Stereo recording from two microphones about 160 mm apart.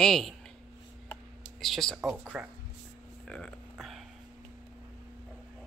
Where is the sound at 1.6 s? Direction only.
Centre (ahead or behind).